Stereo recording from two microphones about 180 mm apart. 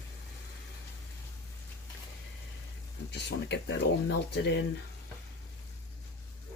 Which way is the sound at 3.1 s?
70° left (ahead or behind).